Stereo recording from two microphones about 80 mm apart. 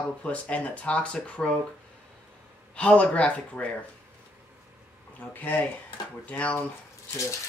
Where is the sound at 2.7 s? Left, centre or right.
Centre.